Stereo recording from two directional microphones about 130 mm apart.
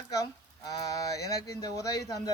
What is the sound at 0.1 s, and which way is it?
Speech, 30° left (ahead or behind).